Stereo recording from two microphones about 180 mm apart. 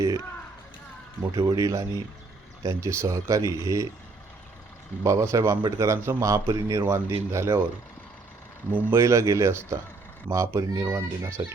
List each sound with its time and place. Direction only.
1.2 s a man's voice: 20° right (ahead or behind)
5.0 s a man's voice: 15° right (ahead or behind)
8.7 s a man's voice: 15° right (ahead or behind)